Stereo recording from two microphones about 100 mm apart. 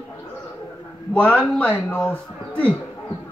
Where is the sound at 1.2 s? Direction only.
15° left (ahead or behind).